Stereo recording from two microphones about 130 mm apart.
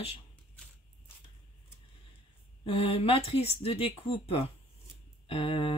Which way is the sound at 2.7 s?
50° left (ahead or behind).